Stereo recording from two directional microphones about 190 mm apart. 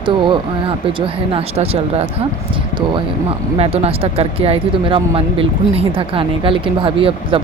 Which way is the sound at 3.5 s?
30° right (ahead or behind).